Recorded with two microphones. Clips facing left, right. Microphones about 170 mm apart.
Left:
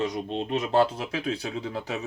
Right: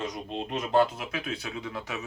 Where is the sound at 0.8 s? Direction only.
30° left (ahead or behind).